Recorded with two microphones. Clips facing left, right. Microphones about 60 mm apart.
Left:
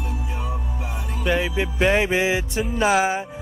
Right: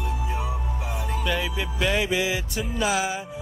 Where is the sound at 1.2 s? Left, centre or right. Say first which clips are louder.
Left 7 dB; left.